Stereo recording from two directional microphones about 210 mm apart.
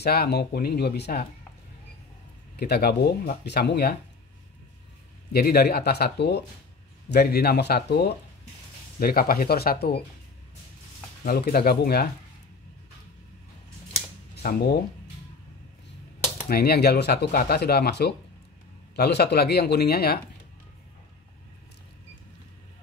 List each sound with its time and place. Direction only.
0.0 s speech: 50° left (ahead or behind)
2.5 s speech: 50° left (ahead or behind)
5.3 s speech: 45° left (ahead or behind)
11.2 s speech: 45° left (ahead or behind)
14.3 s speech: 45° left (ahead or behind)
16.4 s speech: 50° left (ahead or behind)